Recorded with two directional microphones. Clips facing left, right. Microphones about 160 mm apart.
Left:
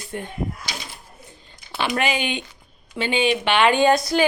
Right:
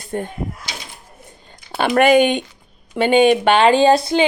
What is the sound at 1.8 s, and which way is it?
Speech, 55° right (ahead or behind).